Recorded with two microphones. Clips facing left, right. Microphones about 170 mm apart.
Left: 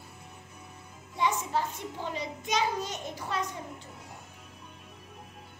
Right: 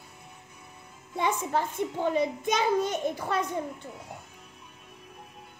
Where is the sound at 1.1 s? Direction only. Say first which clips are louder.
Right 2 dB; 55° right (ahead or behind).